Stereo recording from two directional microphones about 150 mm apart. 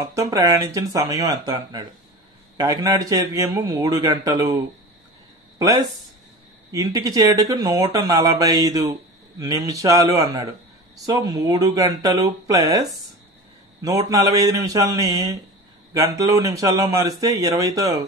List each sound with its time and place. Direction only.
0.0 s speech: 20° right (ahead or behind)
5.6 s speech: 25° right (ahead or behind)
13.8 s speech: 25° right (ahead or behind)